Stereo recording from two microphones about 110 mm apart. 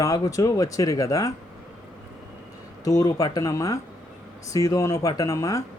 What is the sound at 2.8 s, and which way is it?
Speech, 30° left (ahead or behind).